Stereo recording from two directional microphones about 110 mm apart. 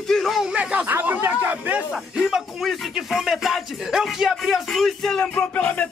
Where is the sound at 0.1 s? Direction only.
Centre (ahead or behind); by 1.8 s 15° right (ahead or behind).